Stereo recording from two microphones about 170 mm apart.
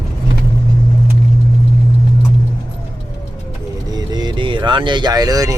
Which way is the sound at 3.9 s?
25° right (ahead or behind).